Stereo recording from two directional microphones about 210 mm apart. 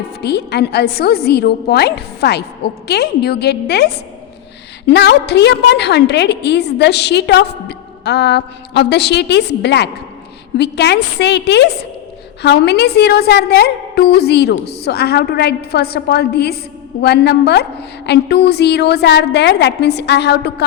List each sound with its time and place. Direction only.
0.2 s a woman's voice: 50° left (ahead or behind)